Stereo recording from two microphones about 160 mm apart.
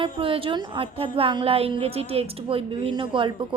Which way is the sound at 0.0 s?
35° right (ahead or behind).